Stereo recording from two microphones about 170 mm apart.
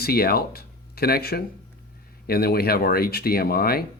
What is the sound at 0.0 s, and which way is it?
Speech, 65° left (ahead or behind).